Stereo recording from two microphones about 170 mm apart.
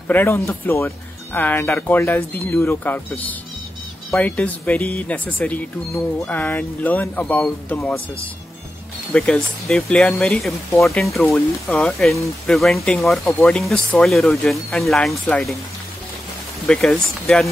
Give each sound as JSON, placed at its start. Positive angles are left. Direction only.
{"t": 0.1, "sound": "speech", "side_deg": 15}
{"t": 9.1, "sound": "speech", "side_deg": 5}
{"t": 16.6, "sound": "speech", "side_deg": 5}